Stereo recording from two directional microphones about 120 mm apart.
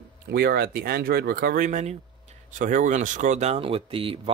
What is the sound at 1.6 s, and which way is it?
Speech, 90° right.